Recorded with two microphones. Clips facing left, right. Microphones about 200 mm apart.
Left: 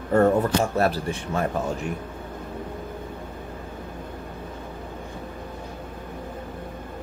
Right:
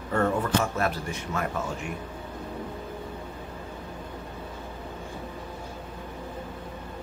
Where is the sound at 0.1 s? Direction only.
35° left (ahead or behind).